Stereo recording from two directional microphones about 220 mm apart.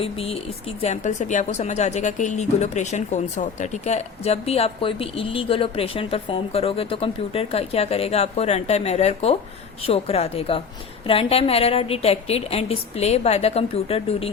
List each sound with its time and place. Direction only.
0.0 s speech: 25° left (ahead or behind)